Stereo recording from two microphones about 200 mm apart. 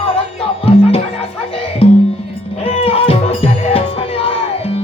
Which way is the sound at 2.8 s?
30° left (ahead or behind).